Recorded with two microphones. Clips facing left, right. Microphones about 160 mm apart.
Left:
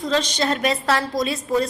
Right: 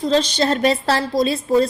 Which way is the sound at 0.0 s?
30° right (ahead or behind).